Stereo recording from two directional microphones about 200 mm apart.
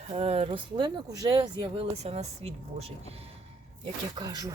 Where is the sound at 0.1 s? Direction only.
30° right (ahead or behind).